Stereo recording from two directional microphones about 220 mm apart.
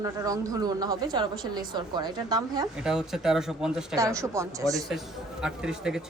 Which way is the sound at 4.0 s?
15° right (ahead or behind).